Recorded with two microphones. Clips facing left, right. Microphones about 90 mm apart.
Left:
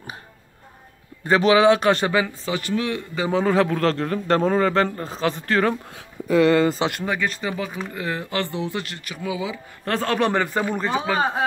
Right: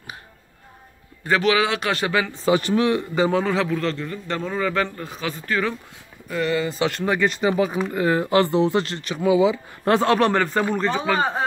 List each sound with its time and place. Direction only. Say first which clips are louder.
1.2 s speech: left 4 dB; 25° left (ahead or behind)
2.4 s speech: right 6 dB; 25° right (ahead or behind)
3.2 s speech: right 1 dB; 5° left (ahead or behind)
3.4 s a man's voice: left 3 dB; 50° left (ahead or behind); by 4.2 s 65° left (ahead or behind)
4.3 s speech: left 6 dB; 40° left (ahead or behind)
5.5 s speech: left 3 dB; 50° left (ahead or behind)
6.3 s speech: left 7 dB; 80° left
7.1 s speech: right 5 dB; 15° right (ahead or behind)
9.9 s speech: right 3 dB; centre (ahead or behind)
10.3 s speech: right 2 dB; 10° left (ahead or behind)